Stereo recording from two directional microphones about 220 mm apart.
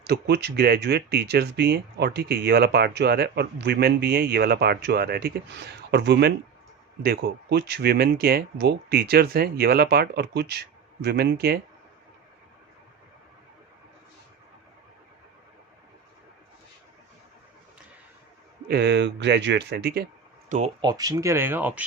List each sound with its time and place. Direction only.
0.0 s speech: 50° right (ahead or behind)
18.7 s speech: 50° right (ahead or behind)
20.5 s speech: 35° right (ahead or behind)
20.8 s speech: 15° right (ahead or behind)